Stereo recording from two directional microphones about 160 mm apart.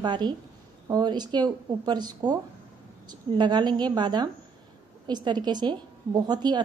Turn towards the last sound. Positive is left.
turn(degrees=-25)  # may be behind; listen again after turning